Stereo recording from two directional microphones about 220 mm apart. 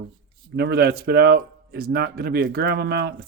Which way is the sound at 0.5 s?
45° right (ahead or behind).